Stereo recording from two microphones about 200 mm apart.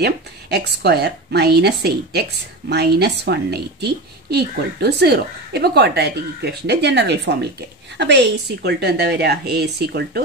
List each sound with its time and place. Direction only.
0.0 s a woman's voice: 55° right (ahead or behind)